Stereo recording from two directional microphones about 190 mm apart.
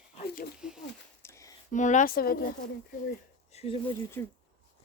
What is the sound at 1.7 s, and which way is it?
Speech, 40° left (ahead or behind).